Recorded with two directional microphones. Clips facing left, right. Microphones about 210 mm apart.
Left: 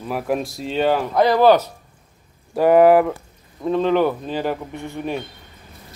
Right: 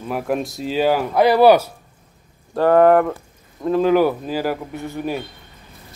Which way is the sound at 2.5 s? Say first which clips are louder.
Left 1 dB; 10° left (ahead or behind).